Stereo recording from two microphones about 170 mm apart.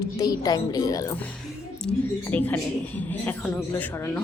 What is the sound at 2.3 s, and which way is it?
A woman's voice, 10° left (ahead or behind).